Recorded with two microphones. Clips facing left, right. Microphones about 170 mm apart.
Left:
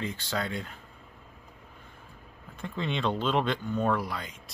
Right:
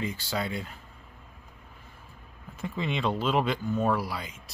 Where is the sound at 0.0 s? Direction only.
5° right (ahead or behind).